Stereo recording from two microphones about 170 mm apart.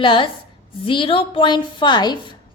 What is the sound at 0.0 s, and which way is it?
A woman's voice, 30° left (ahead or behind).